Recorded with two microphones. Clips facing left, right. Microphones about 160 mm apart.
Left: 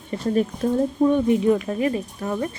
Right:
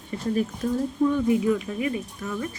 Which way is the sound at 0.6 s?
55° left (ahead or behind).